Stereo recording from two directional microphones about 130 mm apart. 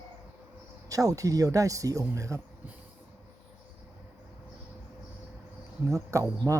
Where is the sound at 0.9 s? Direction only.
25° right (ahead or behind).